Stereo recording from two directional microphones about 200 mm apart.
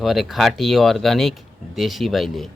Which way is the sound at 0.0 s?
Centre (ahead or behind).